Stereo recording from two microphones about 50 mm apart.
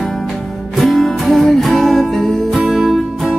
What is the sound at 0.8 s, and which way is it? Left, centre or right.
Music, centre.